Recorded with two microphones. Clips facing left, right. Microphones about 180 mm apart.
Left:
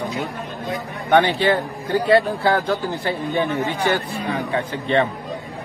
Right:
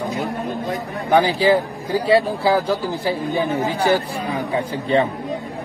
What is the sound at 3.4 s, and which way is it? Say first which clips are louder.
Speech: right 2 dB; 35° right (ahead or behind).